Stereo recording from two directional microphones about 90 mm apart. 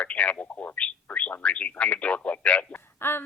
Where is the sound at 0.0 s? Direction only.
15° left (ahead or behind).